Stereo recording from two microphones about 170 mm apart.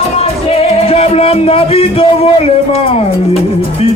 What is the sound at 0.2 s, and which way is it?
Music, 35° left (ahead or behind).